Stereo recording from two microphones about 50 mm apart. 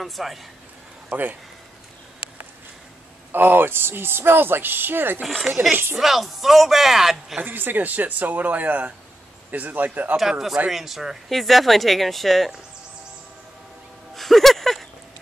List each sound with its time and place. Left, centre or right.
0.0 s speech: centre
1.1 s speech: right
3.3 s speech: right
5.2 s speech: centre
5.5 s speech: centre
7.4 s speech: right
10.7 s speech: centre
14.1 s a sound: centre